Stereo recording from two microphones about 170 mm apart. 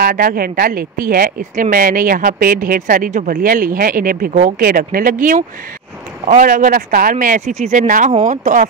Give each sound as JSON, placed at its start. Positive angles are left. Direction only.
{"t": 0.0, "sound": "speech", "side_deg": -55}